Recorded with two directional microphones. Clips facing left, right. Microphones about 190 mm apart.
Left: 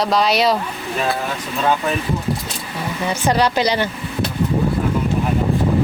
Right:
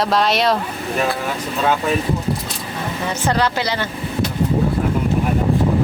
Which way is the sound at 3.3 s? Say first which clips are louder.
Left 3 dB; 15° left (ahead or behind).